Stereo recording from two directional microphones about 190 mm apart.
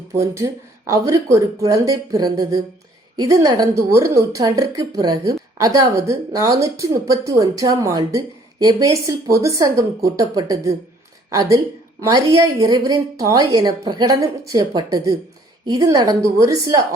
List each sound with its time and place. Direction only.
0.2 s a woman's voice: 15° right (ahead or behind)